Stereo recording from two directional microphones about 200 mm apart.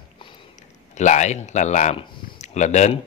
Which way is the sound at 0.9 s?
35° left (ahead or behind).